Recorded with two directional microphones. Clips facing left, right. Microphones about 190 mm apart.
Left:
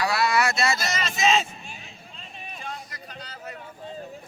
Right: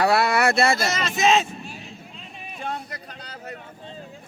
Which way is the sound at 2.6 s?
60° right (ahead or behind).